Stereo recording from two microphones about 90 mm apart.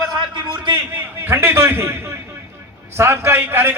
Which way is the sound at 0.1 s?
60° right (ahead or behind).